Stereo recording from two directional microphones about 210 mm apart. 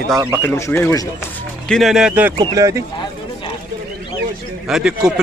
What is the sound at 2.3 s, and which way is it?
Speech, 15° right (ahead or behind).